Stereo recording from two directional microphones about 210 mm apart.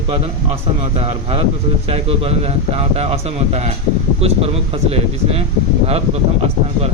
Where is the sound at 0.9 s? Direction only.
30° right (ahead or behind).